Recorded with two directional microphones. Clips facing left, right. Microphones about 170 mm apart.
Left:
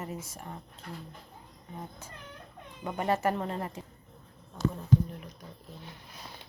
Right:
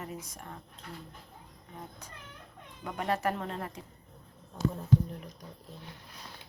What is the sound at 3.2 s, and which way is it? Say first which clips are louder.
Speech: left 3 dB; 5° left (ahead or behind).